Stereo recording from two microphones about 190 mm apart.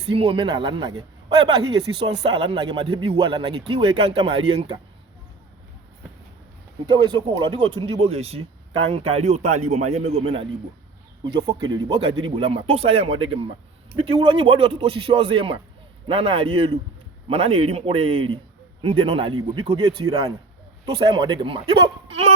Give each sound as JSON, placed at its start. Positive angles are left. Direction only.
{"t": 0.1, "sound": "speech", "side_deg": -30}
{"t": 6.8, "sound": "speech", "side_deg": -25}
{"t": 11.2, "sound": "speech", "side_deg": -25}